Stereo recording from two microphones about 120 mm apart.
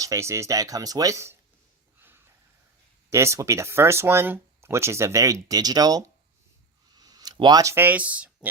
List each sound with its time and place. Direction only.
0.0 s speech: 25° right (ahead or behind)
2.0 s a sound: 20° right (ahead or behind)
3.1 s speech: 25° right (ahead or behind)